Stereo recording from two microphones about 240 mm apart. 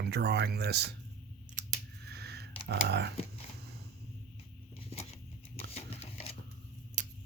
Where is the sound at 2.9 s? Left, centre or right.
Right.